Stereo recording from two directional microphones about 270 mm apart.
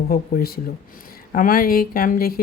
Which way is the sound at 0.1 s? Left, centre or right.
Left.